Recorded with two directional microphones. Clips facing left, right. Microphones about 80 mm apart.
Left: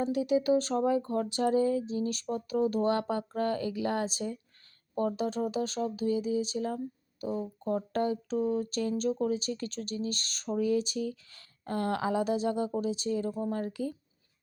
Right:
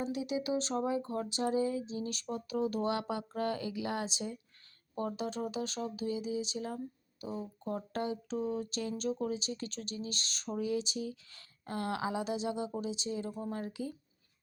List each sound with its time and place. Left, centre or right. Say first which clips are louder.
0.0 s speech: left 7 dB; left